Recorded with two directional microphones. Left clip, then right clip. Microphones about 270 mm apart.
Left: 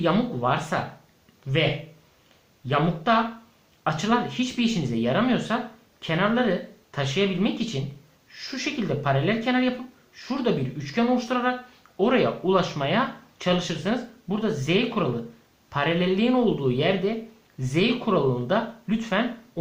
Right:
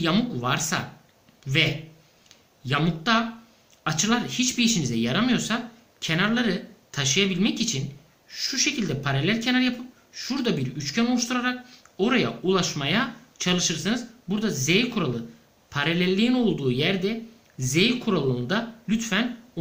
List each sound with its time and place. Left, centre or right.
0.0 s speech: centre
2.6 s speech: centre